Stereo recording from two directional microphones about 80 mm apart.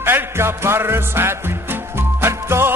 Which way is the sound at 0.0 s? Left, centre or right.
Right.